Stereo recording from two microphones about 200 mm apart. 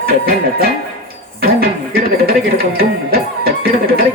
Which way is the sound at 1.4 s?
50° right (ahead or behind).